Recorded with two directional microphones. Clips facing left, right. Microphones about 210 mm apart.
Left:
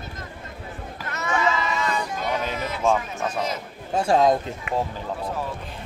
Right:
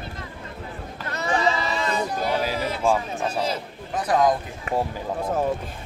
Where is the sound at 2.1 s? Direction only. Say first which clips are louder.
Right 2 dB; 35° right (ahead or behind).